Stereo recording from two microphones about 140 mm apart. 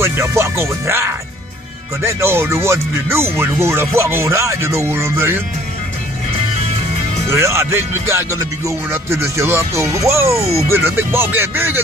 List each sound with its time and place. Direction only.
0.0 s speech: 20° right (ahead or behind)
7.2 s speech: 20° right (ahead or behind)